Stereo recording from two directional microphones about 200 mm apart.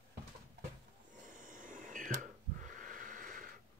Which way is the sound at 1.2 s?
40° right (ahead or behind).